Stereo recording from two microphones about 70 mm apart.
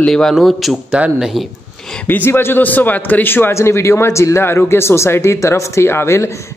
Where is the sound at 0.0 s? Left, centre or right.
Centre.